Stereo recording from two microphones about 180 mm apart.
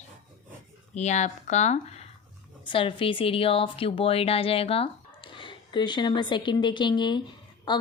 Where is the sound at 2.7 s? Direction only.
30° left (ahead or behind).